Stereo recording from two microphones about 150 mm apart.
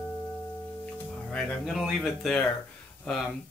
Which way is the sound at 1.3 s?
Centre (ahead or behind).